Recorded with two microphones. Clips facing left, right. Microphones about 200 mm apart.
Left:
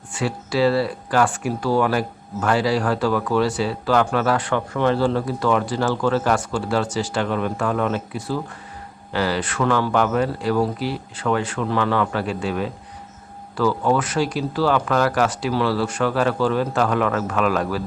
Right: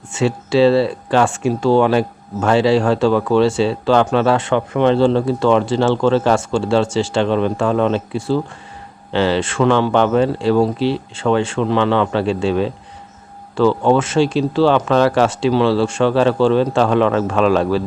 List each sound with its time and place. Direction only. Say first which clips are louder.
0.1 s speech: right 7 dB; 25° right (ahead or behind)